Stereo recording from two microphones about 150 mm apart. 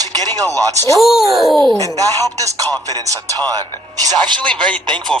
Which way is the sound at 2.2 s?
25° right (ahead or behind).